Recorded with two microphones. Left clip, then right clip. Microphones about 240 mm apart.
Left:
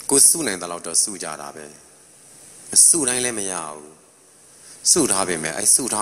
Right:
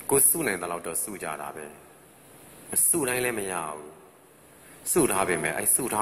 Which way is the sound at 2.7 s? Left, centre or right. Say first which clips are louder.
Left 8 dB; left.